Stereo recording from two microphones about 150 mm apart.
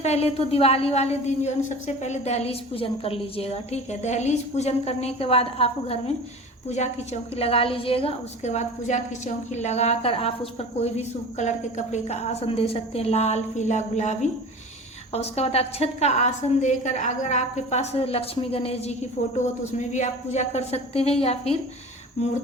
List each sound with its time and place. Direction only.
0.0 s a woman's voice: 45° left (ahead or behind)
19.9 s a woman's voice: 50° left (ahead or behind)